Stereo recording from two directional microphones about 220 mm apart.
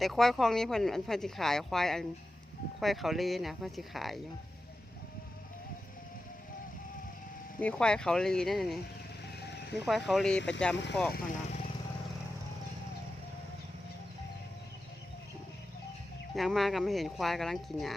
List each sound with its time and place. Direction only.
0.0 s speech: centre (ahead or behind)
7.6 s speech: 5° left (ahead or behind)
9.2 s music: 50° left (ahead or behind)
9.8 s speech: centre (ahead or behind)
11.1 s speech: 30° left (ahead or behind)
16.3 s speech: centre (ahead or behind)